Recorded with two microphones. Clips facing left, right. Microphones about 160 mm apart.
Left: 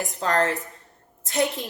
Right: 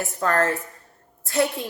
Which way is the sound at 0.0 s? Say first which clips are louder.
Right 1 dB; 20° left (ahead or behind).